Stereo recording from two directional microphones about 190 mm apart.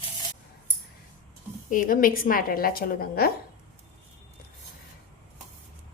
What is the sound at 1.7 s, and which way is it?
A woman's voice, 45° left (ahead or behind).